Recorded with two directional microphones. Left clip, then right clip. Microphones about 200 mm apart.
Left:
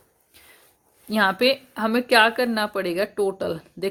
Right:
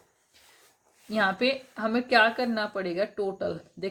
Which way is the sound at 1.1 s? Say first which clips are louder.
Left 6 dB; 40° left (ahead or behind).